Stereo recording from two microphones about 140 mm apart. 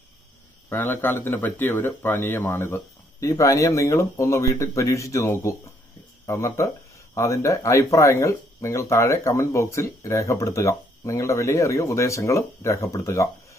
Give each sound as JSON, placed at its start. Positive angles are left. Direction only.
{"t": 0.7, "sound": "speech", "side_deg": 15}